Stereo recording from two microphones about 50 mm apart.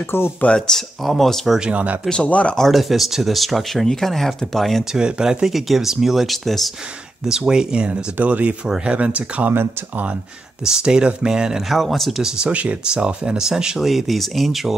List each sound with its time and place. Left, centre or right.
0.1 s speech: left
0.5 s speech: centre
1.7 s speech: right
2.2 s speech: left
2.5 s speech: centre
4.9 s speech: centre
7.2 s speech: centre
8.2 s speech: right
8.6 s speech: centre
8.9 s speech: right
10.6 s speech: centre
11.7 s speech: centre
12.2 s speech: centre
13.8 s speech: centre